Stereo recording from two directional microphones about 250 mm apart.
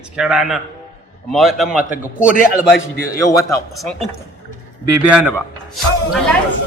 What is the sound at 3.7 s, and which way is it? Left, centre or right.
Speech, centre.